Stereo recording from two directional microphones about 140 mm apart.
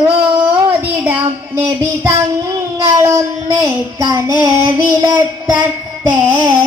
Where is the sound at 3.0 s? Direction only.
20° right (ahead or behind).